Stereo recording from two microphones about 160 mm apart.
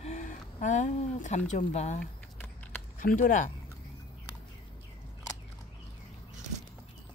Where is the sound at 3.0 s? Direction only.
55° left (ahead or behind).